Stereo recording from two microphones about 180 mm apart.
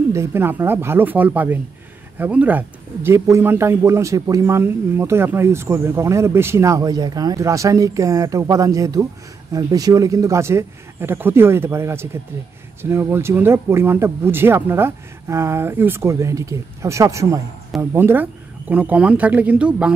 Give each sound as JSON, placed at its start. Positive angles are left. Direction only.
{"t": 0.1, "sound": "speech", "side_deg": -15}